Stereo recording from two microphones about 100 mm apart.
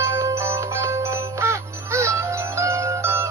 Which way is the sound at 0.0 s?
30° right (ahead or behind).